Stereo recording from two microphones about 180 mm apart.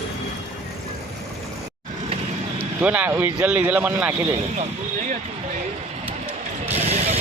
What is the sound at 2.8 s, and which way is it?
Speech, 10° right (ahead or behind).